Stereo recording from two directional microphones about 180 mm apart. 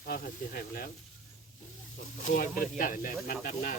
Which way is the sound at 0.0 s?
55° left (ahead or behind).